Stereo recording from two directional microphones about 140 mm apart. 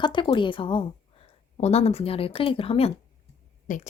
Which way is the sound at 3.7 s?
75° left (ahead or behind).